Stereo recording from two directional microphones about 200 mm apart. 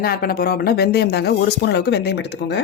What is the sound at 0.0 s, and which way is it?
Speech, 50° left (ahead or behind).